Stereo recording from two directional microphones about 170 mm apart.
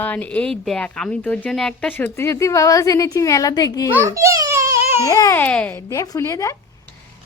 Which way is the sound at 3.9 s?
15° right (ahead or behind).